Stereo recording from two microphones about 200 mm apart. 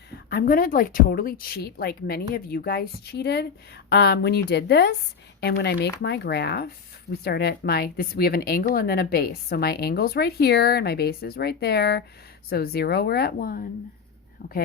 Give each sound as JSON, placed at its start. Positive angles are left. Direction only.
{"t": 0.3, "sound": "a woman's voice", "side_deg": 45}